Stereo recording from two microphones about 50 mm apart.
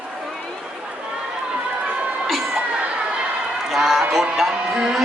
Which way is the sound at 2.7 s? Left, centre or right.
Right.